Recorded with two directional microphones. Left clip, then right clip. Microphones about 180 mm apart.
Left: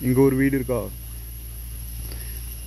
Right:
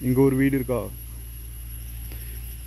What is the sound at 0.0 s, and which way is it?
Speech, centre (ahead or behind).